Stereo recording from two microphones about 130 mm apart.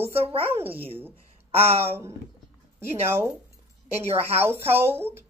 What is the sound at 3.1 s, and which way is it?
Speech, 15° right (ahead or behind).